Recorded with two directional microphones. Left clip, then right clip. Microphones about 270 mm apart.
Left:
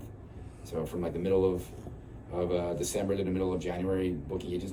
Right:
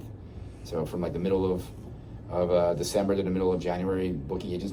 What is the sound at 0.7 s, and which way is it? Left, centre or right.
A man's voice, centre.